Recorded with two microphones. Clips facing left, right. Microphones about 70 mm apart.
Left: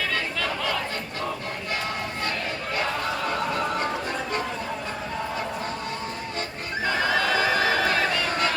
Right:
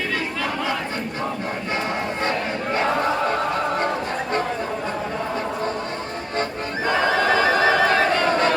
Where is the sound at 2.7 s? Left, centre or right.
Right.